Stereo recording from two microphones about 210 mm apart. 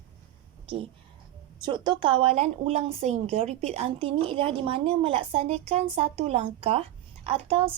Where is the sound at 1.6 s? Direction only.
20° right (ahead or behind).